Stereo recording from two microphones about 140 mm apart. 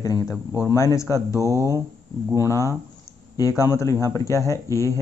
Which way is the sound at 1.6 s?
20° right (ahead or behind).